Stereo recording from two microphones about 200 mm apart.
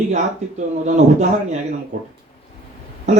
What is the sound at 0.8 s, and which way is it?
Speech, 35° right (ahead or behind).